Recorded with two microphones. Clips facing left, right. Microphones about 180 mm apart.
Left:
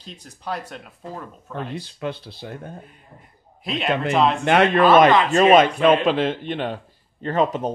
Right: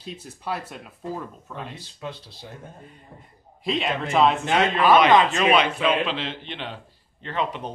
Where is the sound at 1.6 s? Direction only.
65° left (ahead or behind).